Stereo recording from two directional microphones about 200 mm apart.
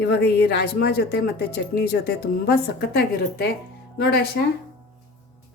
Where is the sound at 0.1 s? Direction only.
55° left (ahead or behind).